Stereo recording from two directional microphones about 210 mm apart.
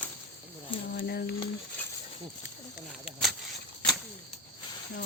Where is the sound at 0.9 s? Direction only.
50° left (ahead or behind).